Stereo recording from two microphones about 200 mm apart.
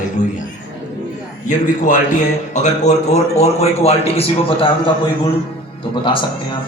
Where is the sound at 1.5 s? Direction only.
40° left (ahead or behind).